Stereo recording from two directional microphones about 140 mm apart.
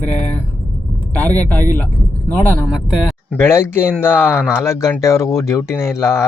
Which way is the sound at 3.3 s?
15° left (ahead or behind).